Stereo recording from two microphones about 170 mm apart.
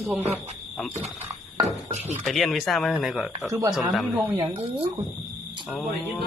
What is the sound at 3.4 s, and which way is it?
Speech, 20° right (ahead or behind).